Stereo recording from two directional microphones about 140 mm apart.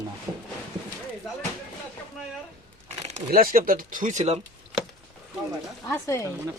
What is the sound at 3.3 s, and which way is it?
Speech, 90° right.